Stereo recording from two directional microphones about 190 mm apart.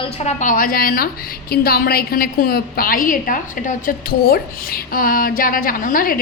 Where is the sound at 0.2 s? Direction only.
40° left (ahead or behind).